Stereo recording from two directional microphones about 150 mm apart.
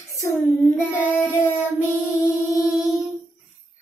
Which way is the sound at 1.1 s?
20° left (ahead or behind).